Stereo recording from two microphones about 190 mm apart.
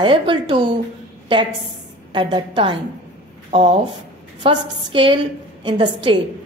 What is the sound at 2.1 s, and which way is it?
A woman's voice, 25° right (ahead or behind).